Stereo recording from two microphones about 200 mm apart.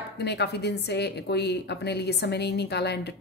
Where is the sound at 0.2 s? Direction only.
55° left (ahead or behind).